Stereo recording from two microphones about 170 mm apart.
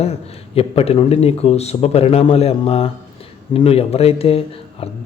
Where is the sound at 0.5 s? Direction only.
35° left (ahead or behind).